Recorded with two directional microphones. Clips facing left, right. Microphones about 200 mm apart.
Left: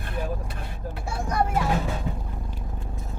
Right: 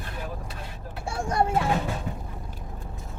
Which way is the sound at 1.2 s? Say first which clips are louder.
Right 1 dB; 30° right (ahead or behind).